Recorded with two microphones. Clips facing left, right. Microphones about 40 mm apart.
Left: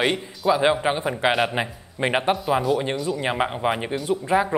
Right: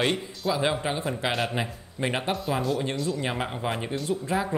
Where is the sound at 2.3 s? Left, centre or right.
Centre.